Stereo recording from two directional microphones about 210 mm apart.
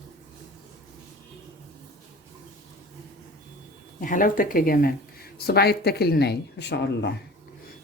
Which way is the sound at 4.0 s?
40° left (ahead or behind).